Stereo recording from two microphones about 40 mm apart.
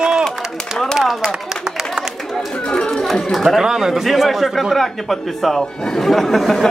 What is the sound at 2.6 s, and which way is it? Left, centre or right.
Speech, left.